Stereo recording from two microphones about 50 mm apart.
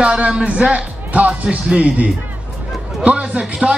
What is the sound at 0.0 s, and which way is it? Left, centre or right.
A man's voice, right.